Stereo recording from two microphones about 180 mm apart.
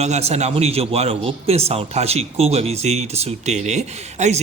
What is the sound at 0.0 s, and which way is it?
A man's voice, 35° right (ahead or behind).